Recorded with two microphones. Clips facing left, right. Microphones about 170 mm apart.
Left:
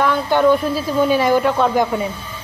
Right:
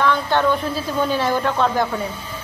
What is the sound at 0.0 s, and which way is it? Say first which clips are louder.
A woman's voice: left 3 dB; 10° left (ahead or behind).